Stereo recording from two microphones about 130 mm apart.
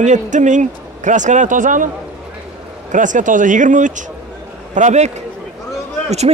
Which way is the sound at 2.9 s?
75° right (ahead or behind).